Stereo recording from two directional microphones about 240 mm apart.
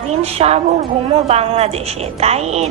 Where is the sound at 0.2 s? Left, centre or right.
Right.